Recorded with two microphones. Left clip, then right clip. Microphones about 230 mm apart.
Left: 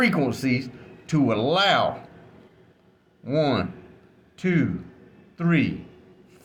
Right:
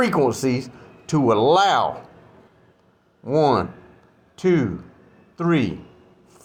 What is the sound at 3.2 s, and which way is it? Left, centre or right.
Speech, centre.